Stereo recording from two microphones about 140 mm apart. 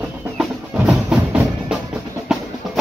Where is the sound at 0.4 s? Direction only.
5° right (ahead or behind).